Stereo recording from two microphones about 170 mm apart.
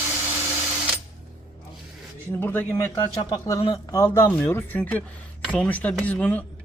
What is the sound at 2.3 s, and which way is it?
Speech, 10° left (ahead or behind).